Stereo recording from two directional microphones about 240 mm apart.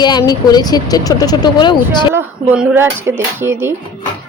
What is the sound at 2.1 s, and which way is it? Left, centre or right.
Speech, centre.